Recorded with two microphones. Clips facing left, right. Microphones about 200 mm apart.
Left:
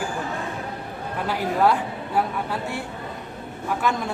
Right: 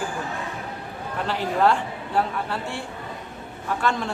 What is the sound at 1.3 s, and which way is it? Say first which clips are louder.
Speech: even; 10° left (ahead or behind).